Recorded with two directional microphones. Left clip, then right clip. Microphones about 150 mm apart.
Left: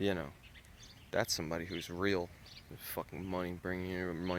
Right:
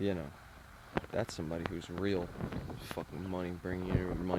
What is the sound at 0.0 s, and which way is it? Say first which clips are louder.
Speech: left 1 dB; 10° right (ahead or behind).